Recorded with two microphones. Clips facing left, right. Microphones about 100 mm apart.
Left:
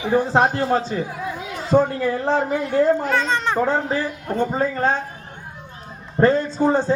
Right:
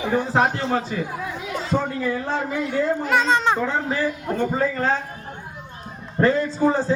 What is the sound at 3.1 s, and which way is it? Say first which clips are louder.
Speech: right 2 dB; 15° right (ahead or behind).